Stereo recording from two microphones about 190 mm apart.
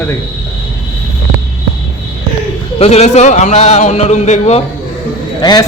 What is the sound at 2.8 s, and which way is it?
A man's voice, 35° left (ahead or behind).